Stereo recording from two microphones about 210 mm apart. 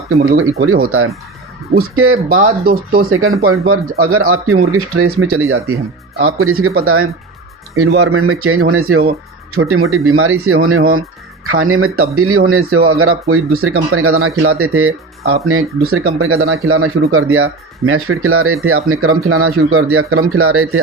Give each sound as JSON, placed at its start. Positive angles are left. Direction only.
{"t": 0.1, "sound": "speech", "side_deg": -50}
{"t": 0.6, "sound": "speech", "side_deg": -90}
{"t": 2.3, "sound": "speech", "side_deg": -45}
{"t": 3.1, "sound": "speech", "side_deg": -80}